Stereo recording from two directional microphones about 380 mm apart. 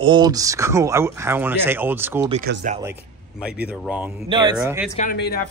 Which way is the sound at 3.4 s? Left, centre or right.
Centre.